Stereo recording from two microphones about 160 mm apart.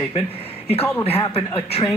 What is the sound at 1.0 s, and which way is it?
Speech, 35° left (ahead or behind).